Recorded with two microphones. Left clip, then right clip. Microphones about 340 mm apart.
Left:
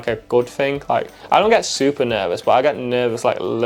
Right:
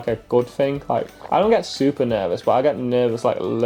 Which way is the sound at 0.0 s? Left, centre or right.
Left.